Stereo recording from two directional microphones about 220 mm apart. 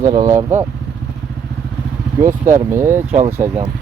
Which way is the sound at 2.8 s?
10° right (ahead or behind).